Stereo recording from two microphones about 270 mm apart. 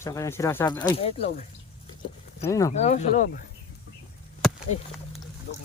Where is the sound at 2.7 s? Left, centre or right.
Left.